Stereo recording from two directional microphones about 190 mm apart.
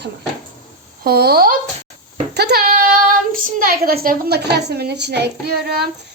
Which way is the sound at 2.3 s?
55° right (ahead or behind).